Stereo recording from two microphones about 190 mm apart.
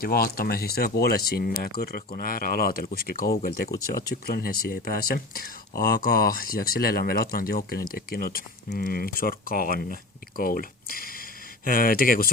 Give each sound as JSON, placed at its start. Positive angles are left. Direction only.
{"t": 0.0, "sound": "speech", "side_deg": 50}